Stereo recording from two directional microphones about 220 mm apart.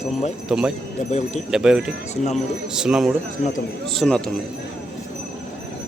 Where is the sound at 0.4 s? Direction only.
5° right (ahead or behind).